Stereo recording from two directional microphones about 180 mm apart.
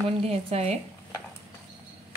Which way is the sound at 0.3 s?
35° right (ahead or behind).